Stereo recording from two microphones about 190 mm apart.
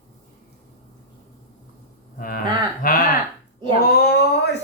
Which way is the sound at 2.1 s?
45° left (ahead or behind).